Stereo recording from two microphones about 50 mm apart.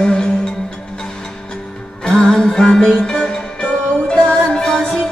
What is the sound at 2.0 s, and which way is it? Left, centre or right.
Music, centre.